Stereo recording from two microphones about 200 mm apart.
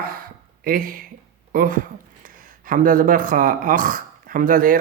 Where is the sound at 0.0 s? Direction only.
45° right (ahead or behind).